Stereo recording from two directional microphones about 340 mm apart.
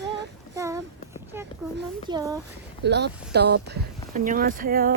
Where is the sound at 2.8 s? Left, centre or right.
Right.